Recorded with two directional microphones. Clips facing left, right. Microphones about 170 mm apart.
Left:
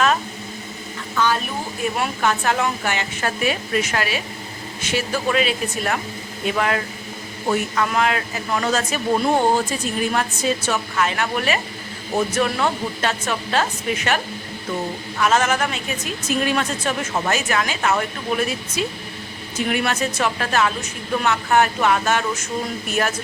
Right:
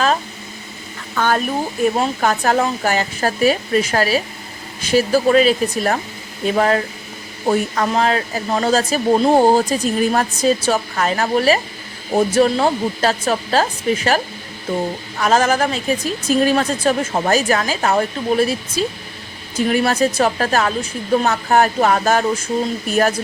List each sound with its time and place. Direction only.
1.1 s speech: 50° right (ahead or behind)
2.0 s speech: 40° right (ahead or behind)
15.2 s speech: 35° right (ahead or behind)